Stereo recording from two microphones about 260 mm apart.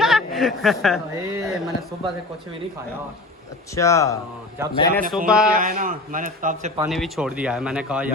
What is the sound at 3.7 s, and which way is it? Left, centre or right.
Speech, centre.